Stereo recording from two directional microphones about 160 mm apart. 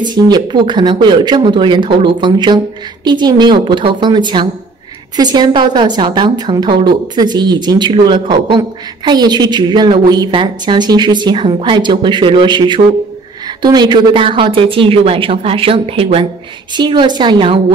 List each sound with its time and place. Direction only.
0.0 s a woman's voice: 25° right (ahead or behind)